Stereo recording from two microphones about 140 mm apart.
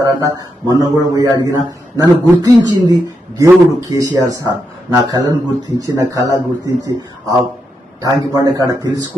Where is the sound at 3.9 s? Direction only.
25° right (ahead or behind).